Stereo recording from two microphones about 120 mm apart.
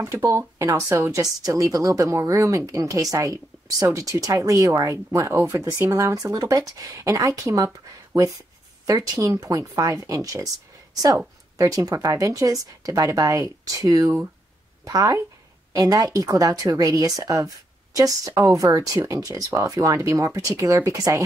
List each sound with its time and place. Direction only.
0.0 s speech: 25° right (ahead or behind)
11.5 s speech: 30° right (ahead or behind)